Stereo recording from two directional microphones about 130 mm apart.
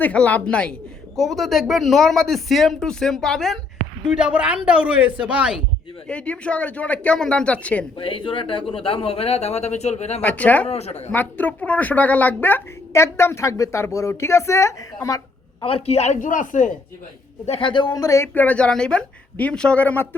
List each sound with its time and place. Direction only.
0.0 s a man's voice: 10° left (ahead or behind); by 5.5 s 5° right (ahead or behind)
6.1 s speech: 10° left (ahead or behind)
7.9 s speech: 40° left (ahead or behind)
10.2 s speech: 10° left (ahead or behind)
10.7 s a woman's voice: 55° left (ahead or behind)
11.1 s speech: 15° left (ahead or behind)
15.6 s a man's voice: 50° left (ahead or behind); by 16.7 s 80° left
17.4 s speech: 45° left (ahead or behind); by 18.3 s 25° left (ahead or behind)
18.3 s speech: 10° left (ahead or behind)